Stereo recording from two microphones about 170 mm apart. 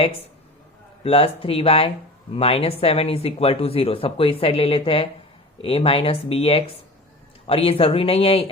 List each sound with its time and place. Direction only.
1.0 s speech: 35° left (ahead or behind)